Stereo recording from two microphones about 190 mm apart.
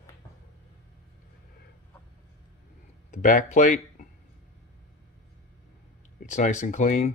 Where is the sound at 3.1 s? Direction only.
40° left (ahead or behind).